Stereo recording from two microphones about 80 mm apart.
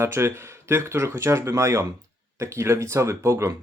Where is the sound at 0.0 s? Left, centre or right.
Right.